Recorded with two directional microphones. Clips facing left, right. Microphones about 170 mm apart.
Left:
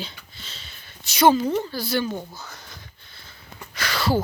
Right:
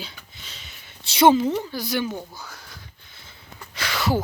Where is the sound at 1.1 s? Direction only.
25° right (ahead or behind).